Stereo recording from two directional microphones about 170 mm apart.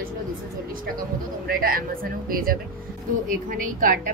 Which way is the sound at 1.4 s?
60° right (ahead or behind).